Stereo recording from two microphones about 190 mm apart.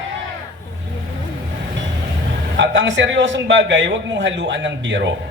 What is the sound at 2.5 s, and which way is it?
A man's voice, 75° right (ahead or behind).